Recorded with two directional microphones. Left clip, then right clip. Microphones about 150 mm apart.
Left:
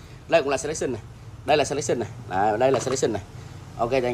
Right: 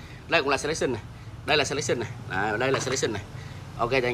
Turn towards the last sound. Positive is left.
turn(degrees=20)  # may be behind; listen again after turning